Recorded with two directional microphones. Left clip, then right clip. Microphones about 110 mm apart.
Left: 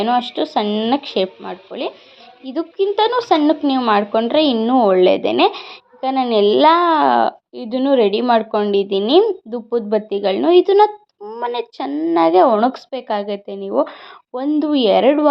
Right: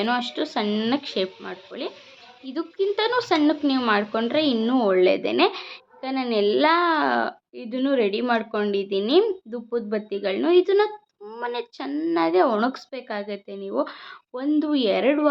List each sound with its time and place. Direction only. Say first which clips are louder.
0.0 s speech: left 7 dB; 20° left (ahead or behind)
4.5 s speech: left 8 dB; 20° left (ahead or behind)
4.9 s a child's voice: left 6 dB; 35° left (ahead or behind)
11.9 s speech: left 5 dB; 20° left (ahead or behind)
12.1 s a child's voice: left 8 dB; 35° left (ahead or behind)